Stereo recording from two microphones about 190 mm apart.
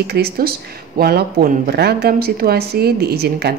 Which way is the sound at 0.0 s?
55° right (ahead or behind).